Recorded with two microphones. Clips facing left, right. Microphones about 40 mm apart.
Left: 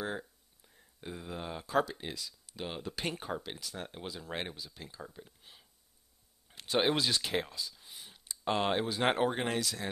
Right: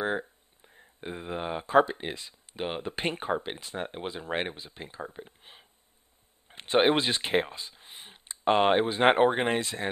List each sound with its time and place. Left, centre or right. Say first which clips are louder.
0.0 s speech: right 8 dB; right